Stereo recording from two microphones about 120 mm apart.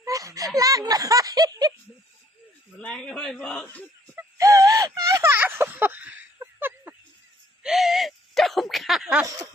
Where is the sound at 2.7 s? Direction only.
10° left (ahead or behind).